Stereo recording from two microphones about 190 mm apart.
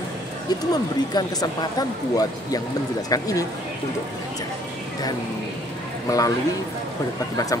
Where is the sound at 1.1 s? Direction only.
20° left (ahead or behind).